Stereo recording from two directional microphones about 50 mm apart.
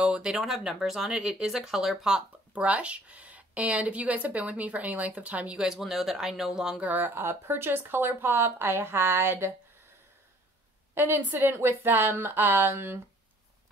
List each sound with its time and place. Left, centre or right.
0.0 s a sound: centre
0.3 s speech: centre
2.5 s a woman's voice: right
5.6 s speech: centre
6.8 s speech: right
7.2 s speech: right
11.0 s speech: right